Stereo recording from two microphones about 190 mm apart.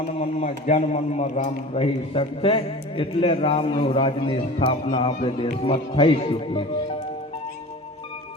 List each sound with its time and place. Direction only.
0.0 s a man's voice: 35° left (ahead or behind)